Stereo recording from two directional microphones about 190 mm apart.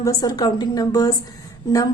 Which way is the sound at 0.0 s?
20° left (ahead or behind).